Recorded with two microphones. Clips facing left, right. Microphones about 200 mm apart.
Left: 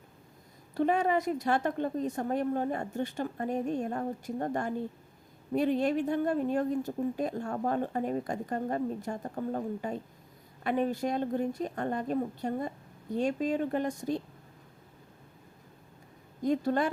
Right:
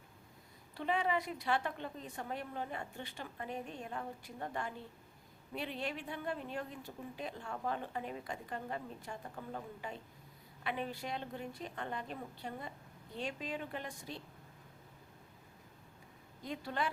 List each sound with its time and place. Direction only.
0.7 s speech: 45° left (ahead or behind)
16.4 s speech: 45° left (ahead or behind)